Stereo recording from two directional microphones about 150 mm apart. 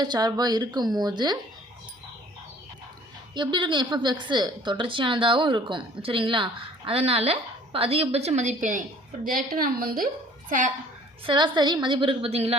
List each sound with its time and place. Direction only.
0.0 s speech: 30° right (ahead or behind)
3.3 s a woman's voice: 30° right (ahead or behind); by 8.8 s 55° right (ahead or behind)
9.2 s a woman's voice: 75° right (ahead or behind)
11.3 s a woman's voice: 30° right (ahead or behind)